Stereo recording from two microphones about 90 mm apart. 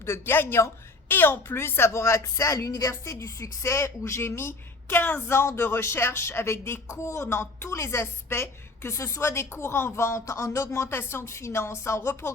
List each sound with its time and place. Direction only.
0.0 s a woman's voice: 25° left (ahead or behind)
10.8 s speech: 25° left (ahead or behind)